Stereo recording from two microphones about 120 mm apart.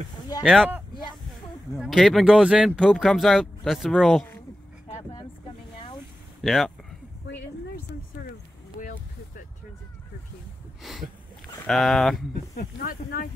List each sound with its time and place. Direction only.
0.4 s speech: centre (ahead or behind)
1.7 s speech: centre (ahead or behind)
6.4 s speech: centre (ahead or behind)
8.8 s vehicle: 90° left
10.8 s a sound: centre (ahead or behind)
11.6 s speech: centre (ahead or behind)